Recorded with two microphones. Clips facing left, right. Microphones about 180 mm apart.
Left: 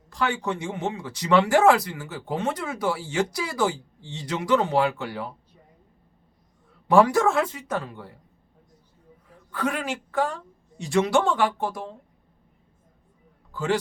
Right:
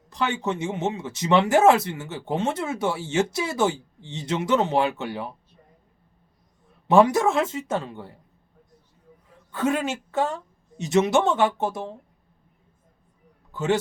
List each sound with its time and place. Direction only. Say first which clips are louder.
0.1 s speech: right 1 dB; 20° right (ahead or behind)
6.8 s speech: right 1 dB; 20° right (ahead or behind)
9.5 s speech: right 3 dB; 25° right (ahead or behind)
13.5 s a man's voice: right 2 dB; 20° right (ahead or behind)